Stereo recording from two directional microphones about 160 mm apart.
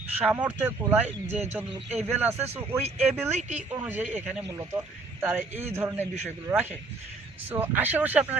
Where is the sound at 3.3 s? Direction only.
45° right (ahead or behind).